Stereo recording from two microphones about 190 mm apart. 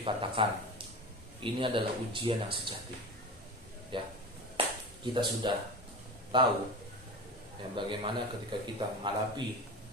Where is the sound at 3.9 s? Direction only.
25° right (ahead or behind).